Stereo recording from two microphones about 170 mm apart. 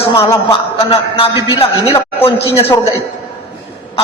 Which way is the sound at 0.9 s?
30° left (ahead or behind).